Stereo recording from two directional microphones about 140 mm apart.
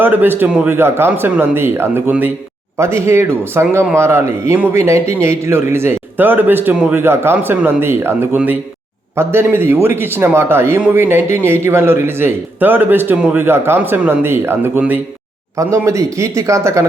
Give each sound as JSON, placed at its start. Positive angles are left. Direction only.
{"t": 0.0, "sound": "a man's voice", "side_deg": -15}
{"t": 15.5, "sound": "speech", "side_deg": -20}